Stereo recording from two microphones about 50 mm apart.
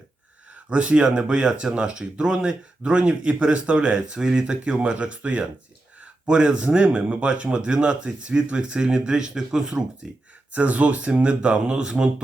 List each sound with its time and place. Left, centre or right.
0.7 s speech: right